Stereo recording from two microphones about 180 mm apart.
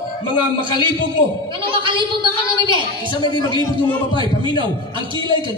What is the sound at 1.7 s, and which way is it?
Speech, 25° right (ahead or behind).